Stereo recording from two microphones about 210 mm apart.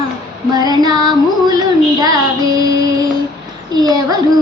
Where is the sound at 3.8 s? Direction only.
20° right (ahead or behind).